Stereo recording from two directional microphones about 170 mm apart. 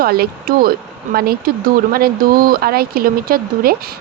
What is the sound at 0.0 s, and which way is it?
Speech, 60° right (ahead or behind).